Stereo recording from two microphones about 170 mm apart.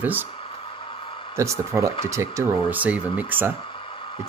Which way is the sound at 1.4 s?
15° right (ahead or behind).